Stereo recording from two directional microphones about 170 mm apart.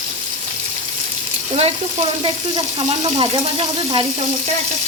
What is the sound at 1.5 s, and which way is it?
Frying, 35° right (ahead or behind).